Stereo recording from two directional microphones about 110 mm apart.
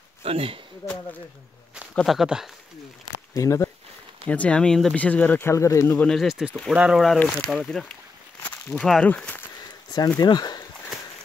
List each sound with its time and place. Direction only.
0.2 s speech: 60° right (ahead or behind)
2.0 s speech: 5° right (ahead or behind)
3.3 s speech: 30° left (ahead or behind)
4.3 s speech: 10° left (ahead or behind); by 5.9 s 25° left (ahead or behind)
5.9 s speech: 5° left (ahead or behind)
9.6 s speech: 35° left (ahead or behind)